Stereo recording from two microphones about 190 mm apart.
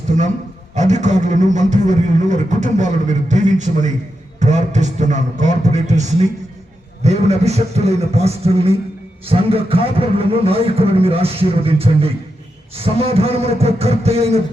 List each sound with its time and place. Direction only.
0.8 s speech: 40° right (ahead or behind)